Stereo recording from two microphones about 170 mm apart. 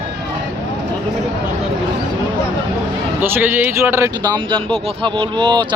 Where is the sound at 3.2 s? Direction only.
10° right (ahead or behind).